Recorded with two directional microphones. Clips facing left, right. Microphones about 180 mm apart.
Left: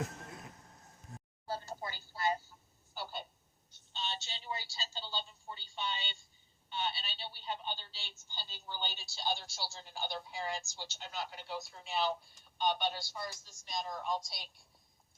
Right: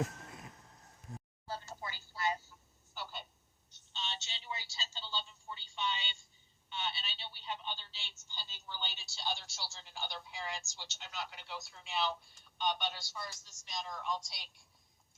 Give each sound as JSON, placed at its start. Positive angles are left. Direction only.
{"t": 1.5, "sound": "a sound", "side_deg": 35}
{"t": 2.9, "sound": "telephone", "side_deg": 40}
{"t": 3.9, "sound": "speech", "side_deg": 35}